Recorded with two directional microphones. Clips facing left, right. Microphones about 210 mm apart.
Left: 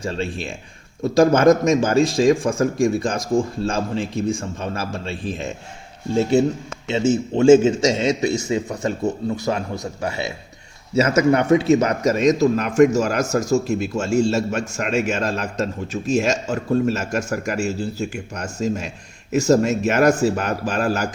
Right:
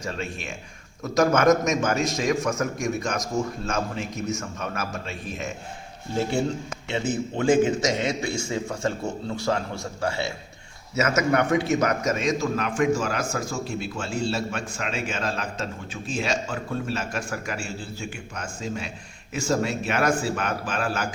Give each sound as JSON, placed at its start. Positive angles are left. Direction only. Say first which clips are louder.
{"t": 0.0, "sound": "a man's voice", "louder": "left 6 dB", "side_deg": 30}
{"t": 10.0, "sound": "a man's voice", "louder": "even", "side_deg": 20}
{"t": 10.9, "sound": "a man's voice", "louder": "left 6 dB", "side_deg": 30}